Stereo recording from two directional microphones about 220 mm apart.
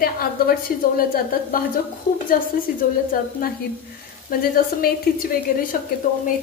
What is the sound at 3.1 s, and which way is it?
A woman's voice, 40° left (ahead or behind).